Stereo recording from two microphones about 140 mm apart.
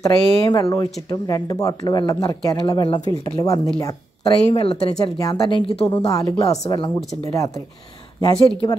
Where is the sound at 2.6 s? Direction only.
35° left (ahead or behind).